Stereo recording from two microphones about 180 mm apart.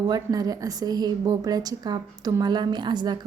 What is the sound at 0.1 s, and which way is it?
A woman's voice, 20° right (ahead or behind).